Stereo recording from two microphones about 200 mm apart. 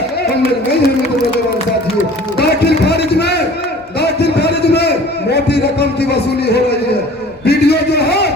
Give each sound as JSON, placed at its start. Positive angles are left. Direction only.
{"t": 2.4, "sound": "a man's voice", "side_deg": 55}
{"t": 4.0, "sound": "a sound", "side_deg": 55}
{"t": 7.4, "sound": "a man's voice", "side_deg": 55}